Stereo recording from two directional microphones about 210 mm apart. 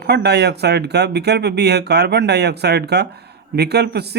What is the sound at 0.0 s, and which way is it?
Speech, 50° right (ahead or behind).